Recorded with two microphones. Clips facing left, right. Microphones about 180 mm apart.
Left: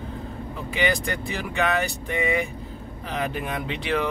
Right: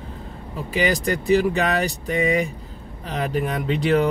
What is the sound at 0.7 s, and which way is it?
A man's voice, 35° right (ahead or behind).